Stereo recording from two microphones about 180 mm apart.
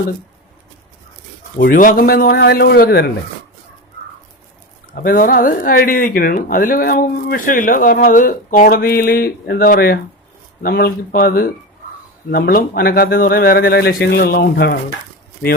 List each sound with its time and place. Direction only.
1.5 s speech: 50° left (ahead or behind)
5.0 s speech: 50° left (ahead or behind); by 14.8 s 70° left (ahead or behind)